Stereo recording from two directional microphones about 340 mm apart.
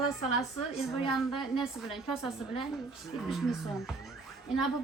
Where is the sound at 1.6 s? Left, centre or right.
Centre.